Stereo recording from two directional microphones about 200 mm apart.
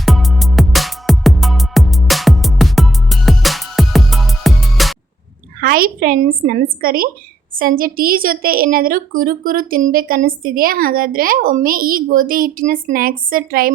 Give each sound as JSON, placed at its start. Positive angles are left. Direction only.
{"t": 0.0, "sound": "music", "side_deg": 0}
{"t": 5.5, "sound": "a woman's voice", "side_deg": -50}